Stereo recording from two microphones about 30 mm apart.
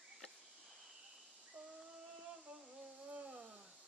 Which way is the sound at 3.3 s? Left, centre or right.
Right.